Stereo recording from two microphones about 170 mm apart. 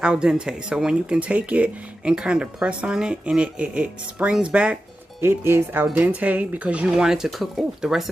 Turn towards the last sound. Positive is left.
turn(degrees=0)  # may be behind; listen again after turning